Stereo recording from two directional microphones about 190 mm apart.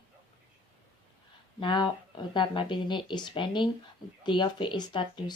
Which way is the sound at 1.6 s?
25° left (ahead or behind).